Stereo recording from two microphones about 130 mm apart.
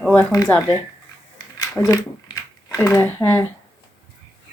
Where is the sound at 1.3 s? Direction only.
25° left (ahead or behind).